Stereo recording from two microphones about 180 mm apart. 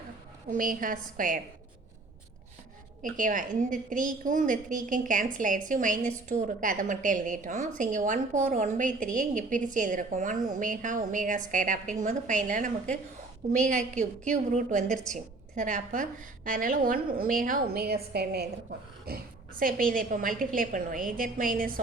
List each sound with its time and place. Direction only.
0.5 s a woman's voice: 50° right (ahead or behind)
3.0 s a woman's voice: 45° right (ahead or behind)
14.8 s a woman's voice: 5° left (ahead or behind)
15.1 s a woman's voice: 45° right (ahead or behind)